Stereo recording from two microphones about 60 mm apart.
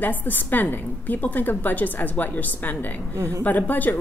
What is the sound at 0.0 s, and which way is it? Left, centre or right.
A woman's voice, left.